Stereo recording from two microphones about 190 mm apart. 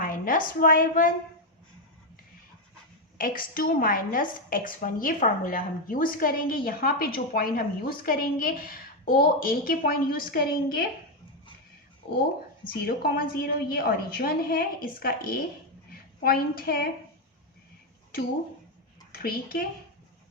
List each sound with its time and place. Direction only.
0.0 s a woman's voice: 45° left (ahead or behind)
3.2 s a woman's voice: 45° left (ahead or behind)
12.6 s a woman's voice: 50° left (ahead or behind)
19.1 s a child's voice: 50° left (ahead or behind)